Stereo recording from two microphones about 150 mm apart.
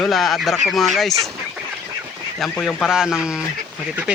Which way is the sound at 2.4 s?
5° left (ahead or behind).